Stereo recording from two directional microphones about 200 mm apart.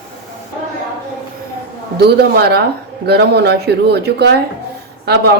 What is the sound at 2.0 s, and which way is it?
Speech, 55° right (ahead or behind).